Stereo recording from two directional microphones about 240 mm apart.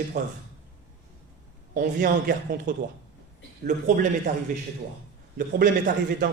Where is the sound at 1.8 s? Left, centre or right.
Right.